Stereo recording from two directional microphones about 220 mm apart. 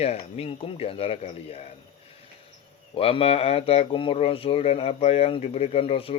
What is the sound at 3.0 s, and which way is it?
Speech, 25° left (ahead or behind).